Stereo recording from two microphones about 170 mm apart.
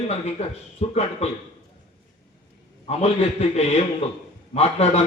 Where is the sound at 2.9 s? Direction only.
40° left (ahead or behind).